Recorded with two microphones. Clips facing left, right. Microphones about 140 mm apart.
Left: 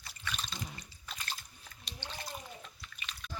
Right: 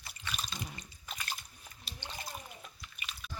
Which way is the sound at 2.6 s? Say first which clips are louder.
Even; 10° right (ahead or behind).